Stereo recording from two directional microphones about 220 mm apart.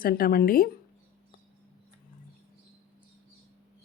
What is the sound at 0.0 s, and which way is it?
Speech, 40° left (ahead or behind).